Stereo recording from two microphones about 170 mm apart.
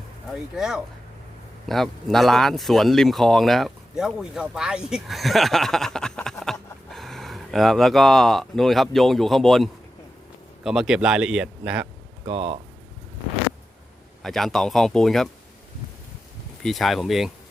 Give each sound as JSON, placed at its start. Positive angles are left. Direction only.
{"t": 0.3, "sound": "speech", "side_deg": -5}
{"t": 12.2, "sound": "speech", "side_deg": -35}
{"t": 14.2, "sound": "speech", "side_deg": 0}
{"t": 16.6, "sound": "speech", "side_deg": 0}